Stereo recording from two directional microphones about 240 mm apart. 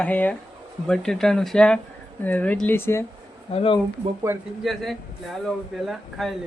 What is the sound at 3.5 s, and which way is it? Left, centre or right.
Speech, left.